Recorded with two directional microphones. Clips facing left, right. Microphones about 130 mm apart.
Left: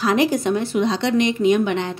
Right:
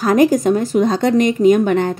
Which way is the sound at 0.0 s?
45° right (ahead or behind).